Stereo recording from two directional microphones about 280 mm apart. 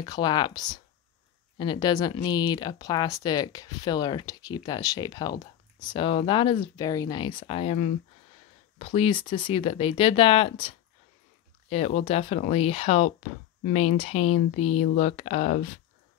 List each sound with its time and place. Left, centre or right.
0.0 s speech: centre
11.7 s speech: left